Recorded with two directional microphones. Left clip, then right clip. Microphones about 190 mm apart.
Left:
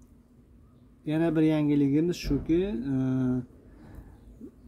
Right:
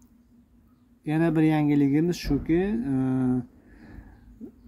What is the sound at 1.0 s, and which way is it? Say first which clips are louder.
Speech: right 2 dB; 15° right (ahead or behind).